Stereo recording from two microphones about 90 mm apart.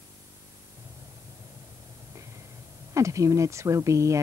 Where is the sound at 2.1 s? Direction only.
35° right (ahead or behind).